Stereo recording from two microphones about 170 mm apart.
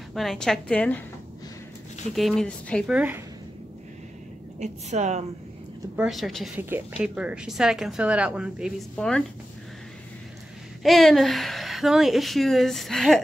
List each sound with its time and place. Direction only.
0.1 s a woman's voice: centre (ahead or behind)
2.1 s a woman's voice: centre (ahead or behind)
2.9 s speech: 10° right (ahead or behind)
4.6 s a woman's voice: 40° right (ahead or behind)
5.9 s a woman's voice: centre (ahead or behind)
10.8 s a woman's voice: centre (ahead or behind)